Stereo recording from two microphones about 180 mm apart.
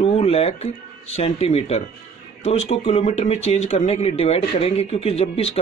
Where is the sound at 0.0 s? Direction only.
35° left (ahead or behind).